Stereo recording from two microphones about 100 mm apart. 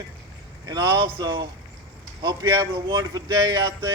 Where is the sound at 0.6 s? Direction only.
45° right (ahead or behind).